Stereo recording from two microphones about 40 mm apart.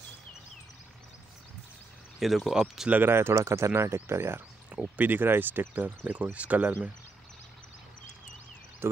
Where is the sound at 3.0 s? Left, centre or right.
Right.